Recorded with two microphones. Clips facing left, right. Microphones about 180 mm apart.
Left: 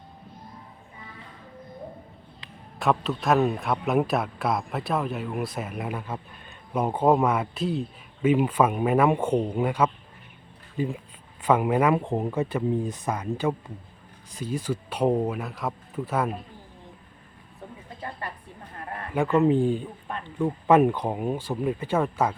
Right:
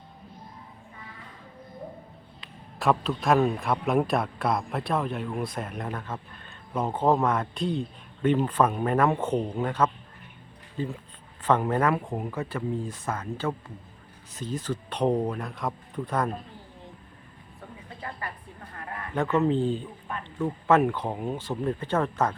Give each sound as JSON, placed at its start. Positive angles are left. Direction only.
{"t": 2.7, "sound": "a man's voice", "side_deg": 0}
{"t": 12.0, "sound": "speech", "side_deg": 25}
{"t": 19.1, "sound": "speech", "side_deg": 10}